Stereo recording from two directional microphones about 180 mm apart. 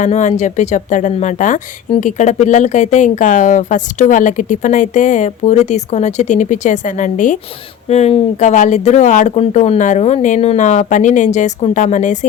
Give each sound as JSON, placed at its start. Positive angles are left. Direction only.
{"t": 0.0, "sound": "speech", "side_deg": 40}